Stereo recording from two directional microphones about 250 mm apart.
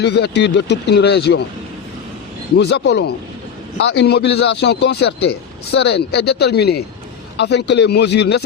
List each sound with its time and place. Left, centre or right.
0.0 s speech: left
2.6 s speech: left